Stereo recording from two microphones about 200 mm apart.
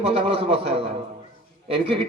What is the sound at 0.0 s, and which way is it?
Speech, 30° right (ahead or behind).